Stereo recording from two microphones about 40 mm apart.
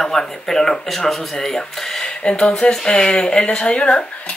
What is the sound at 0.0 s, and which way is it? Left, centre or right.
Speech, centre.